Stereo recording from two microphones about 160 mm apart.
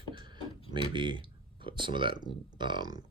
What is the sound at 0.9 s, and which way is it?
Speech, 30° right (ahead or behind).